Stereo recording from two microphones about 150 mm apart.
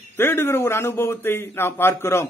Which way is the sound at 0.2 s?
15° left (ahead or behind).